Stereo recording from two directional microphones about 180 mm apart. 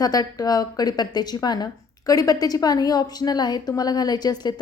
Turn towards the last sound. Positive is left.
turn(degrees=20)  # may be behind; listen again after turning